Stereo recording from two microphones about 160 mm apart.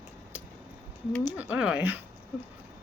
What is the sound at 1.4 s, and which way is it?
Speech, 5° right (ahead or behind).